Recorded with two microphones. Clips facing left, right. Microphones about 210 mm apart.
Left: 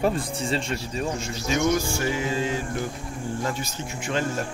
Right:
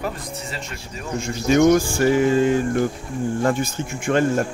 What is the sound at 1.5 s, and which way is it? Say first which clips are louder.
Speech: right 8 dB; 60° right (ahead or behind).